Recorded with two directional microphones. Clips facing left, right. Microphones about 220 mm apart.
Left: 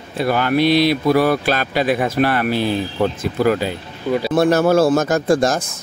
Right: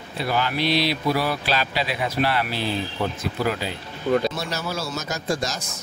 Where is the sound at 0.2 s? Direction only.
55° left (ahead or behind).